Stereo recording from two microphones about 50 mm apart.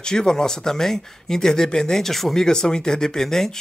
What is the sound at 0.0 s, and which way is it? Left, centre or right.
A man's voice, centre.